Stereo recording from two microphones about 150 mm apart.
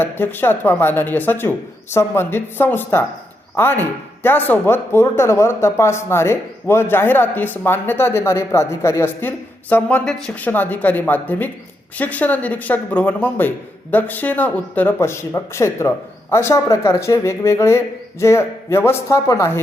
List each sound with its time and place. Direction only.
0.0 s speech: 15° left (ahead or behind)